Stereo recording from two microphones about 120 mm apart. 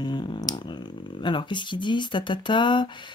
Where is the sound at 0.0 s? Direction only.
40° left (ahead or behind).